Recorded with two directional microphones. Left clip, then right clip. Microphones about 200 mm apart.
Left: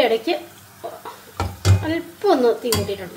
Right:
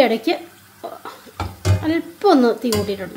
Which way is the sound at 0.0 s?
50° right (ahead or behind).